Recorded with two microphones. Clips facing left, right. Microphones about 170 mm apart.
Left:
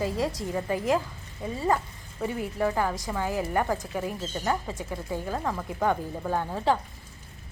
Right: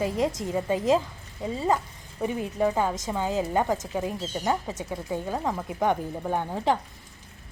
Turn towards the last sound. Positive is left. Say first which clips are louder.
# even
turn(degrees=-15)  # may be behind; listen again after turning